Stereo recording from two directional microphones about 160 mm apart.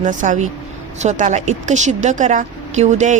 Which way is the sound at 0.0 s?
50° right (ahead or behind).